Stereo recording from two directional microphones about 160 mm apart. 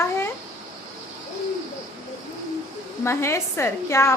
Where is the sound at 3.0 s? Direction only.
15° left (ahead or behind).